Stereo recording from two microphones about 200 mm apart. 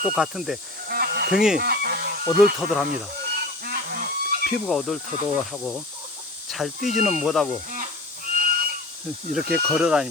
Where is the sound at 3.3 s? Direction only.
50° right (ahead or behind).